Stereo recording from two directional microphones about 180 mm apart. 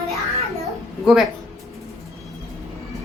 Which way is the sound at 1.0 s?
Centre (ahead or behind).